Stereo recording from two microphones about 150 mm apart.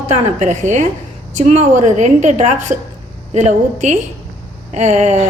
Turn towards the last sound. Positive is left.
turn(degrees=-50)  # may be behind; listen again after turning